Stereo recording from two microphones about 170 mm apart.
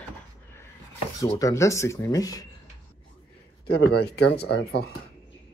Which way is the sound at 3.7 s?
75° left (ahead or behind).